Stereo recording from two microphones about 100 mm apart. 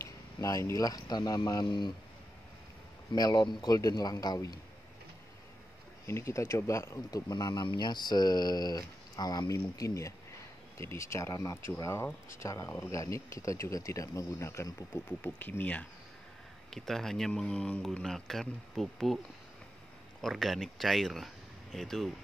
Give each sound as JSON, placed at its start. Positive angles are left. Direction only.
{"t": 0.0, "sound": "speech", "side_deg": 30}
{"t": 3.1, "sound": "speech", "side_deg": 45}
{"t": 6.0, "sound": "speech", "side_deg": 25}
{"t": 15.0, "sound": "speech", "side_deg": 20}
{"t": 16.7, "sound": "speech", "side_deg": 5}
{"t": 20.2, "sound": "speech", "side_deg": 0}